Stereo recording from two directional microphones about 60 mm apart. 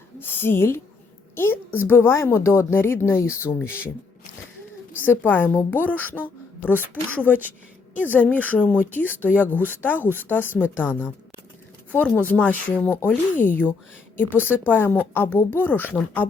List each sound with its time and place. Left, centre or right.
0.2 s a woman's voice: left
5.0 s a woman's voice: left
12.1 s a woman's voice: left